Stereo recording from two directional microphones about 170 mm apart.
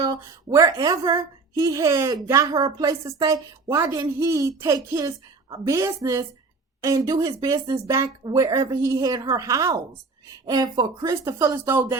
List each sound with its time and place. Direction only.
0.0 s a woman's voice: 20° right (ahead or behind)